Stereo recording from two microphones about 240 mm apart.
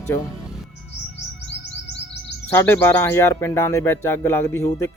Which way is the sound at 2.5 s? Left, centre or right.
Centre.